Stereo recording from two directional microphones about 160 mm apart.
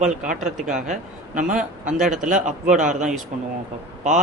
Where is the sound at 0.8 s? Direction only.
55° right (ahead or behind).